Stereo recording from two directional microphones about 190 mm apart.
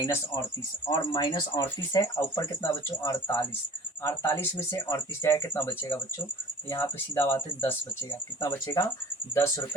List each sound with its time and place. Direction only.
0.9 s speech: 25° left (ahead or behind)